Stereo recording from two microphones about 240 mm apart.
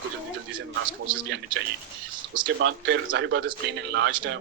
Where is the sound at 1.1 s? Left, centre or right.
Centre.